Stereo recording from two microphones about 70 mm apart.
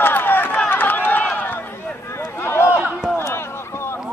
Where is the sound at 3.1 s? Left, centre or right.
Left.